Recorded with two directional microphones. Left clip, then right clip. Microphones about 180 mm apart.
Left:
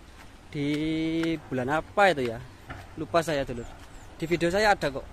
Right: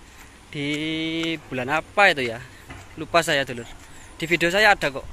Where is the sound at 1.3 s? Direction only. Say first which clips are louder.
Right 3 dB; 15° left (ahead or behind).